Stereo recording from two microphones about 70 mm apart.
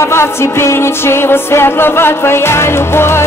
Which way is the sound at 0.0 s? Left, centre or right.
Left.